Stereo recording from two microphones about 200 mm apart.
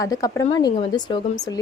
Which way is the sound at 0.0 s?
15° left (ahead or behind).